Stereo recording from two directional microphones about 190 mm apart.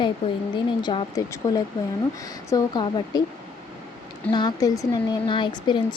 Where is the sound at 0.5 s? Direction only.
25° left (ahead or behind).